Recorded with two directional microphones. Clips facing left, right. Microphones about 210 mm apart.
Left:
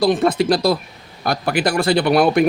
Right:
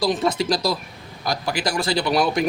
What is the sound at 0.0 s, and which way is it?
Speech, 60° left (ahead or behind).